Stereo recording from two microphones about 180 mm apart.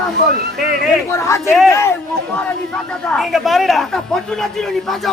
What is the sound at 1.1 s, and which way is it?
Speech, 15° left (ahead or behind).